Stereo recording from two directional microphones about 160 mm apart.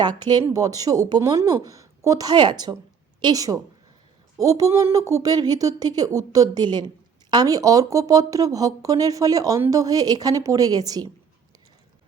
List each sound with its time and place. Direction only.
0.0 s a woman's voice: 25° right (ahead or behind)